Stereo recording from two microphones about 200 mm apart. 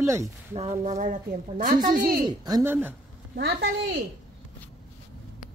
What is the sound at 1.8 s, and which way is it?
A man's voice, 20° right (ahead or behind).